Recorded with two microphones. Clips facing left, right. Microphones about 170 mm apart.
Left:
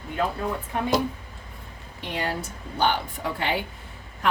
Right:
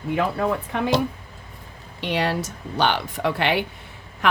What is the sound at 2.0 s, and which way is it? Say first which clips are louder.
Speech: right 6 dB; 85° right.